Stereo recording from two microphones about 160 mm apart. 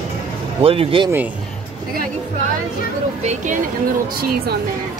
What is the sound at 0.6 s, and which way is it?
Speech, 35° right (ahead or behind).